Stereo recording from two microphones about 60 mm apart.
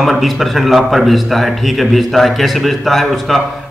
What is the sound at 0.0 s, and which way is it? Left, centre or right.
Speech, centre.